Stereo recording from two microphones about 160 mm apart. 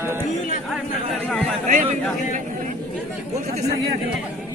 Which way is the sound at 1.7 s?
50° right (ahead or behind).